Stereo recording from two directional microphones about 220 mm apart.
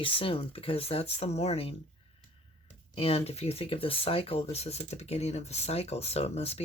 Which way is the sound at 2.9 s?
25° left (ahead or behind).